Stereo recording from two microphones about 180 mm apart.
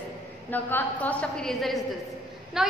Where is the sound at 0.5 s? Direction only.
10° left (ahead or behind).